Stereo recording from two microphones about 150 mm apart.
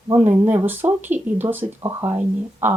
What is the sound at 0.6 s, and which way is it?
Speech, 15° right (ahead or behind).